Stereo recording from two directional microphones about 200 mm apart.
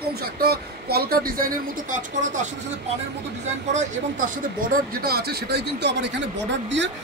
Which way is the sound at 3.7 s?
45° right (ahead or behind).